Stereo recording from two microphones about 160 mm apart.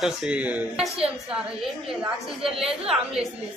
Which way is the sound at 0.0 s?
5° right (ahead or behind).